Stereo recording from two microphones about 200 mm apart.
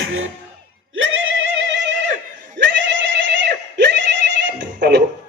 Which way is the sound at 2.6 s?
65° right (ahead or behind).